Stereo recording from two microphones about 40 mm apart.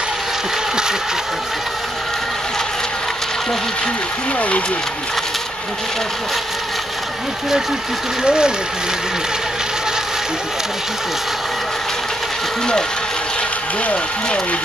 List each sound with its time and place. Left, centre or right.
4.4 s speech: left
8.2 s speech: centre